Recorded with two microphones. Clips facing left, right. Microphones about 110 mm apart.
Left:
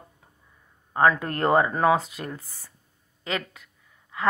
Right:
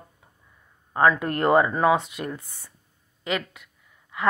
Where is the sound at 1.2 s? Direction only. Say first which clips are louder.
Right 2 dB; 30° left (ahead or behind).